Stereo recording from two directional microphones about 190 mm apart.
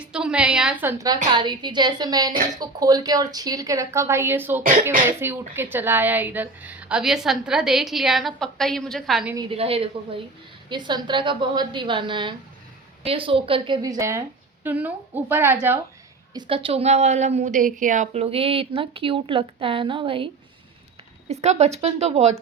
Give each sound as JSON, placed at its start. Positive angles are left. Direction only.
{"t": 0.0, "sound": "a woman's voice", "side_deg": -5}
{"t": 4.6, "sound": "speech", "side_deg": -45}
{"t": 5.0, "sound": "a woman's voice", "side_deg": -10}
{"t": 9.5, "sound": "a woman's voice", "side_deg": -30}
{"t": 16.3, "sound": "a woman's voice", "side_deg": -30}